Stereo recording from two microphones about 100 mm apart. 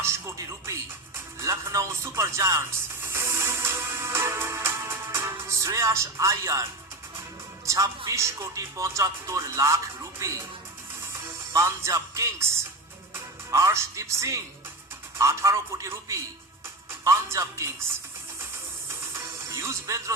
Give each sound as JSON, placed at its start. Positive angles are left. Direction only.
{"t": 0.0, "sound": "music", "side_deg": -30}
{"t": 7.6, "sound": "speech", "side_deg": -35}
{"t": 11.5, "sound": "a man's voice", "side_deg": -30}
{"t": 19.1, "sound": "music", "side_deg": -30}